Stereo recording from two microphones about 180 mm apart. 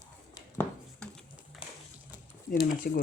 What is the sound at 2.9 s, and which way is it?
Speech, 55° left (ahead or behind).